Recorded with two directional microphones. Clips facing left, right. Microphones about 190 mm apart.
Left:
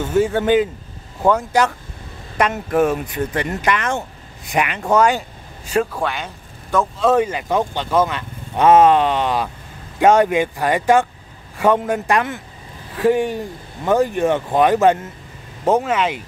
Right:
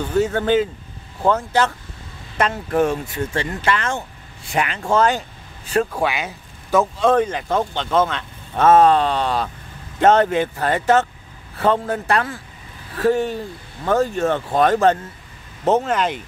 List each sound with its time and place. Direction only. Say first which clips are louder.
0.2 s speech: left 2 dB; 15° left (ahead or behind)
3.1 s speech: left 2 dB; 15° left (ahead or behind)
5.9 s speech: right 2 dB; 5° right (ahead or behind)